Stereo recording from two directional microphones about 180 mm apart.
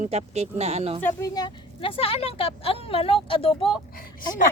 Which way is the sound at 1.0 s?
15° left (ahead or behind).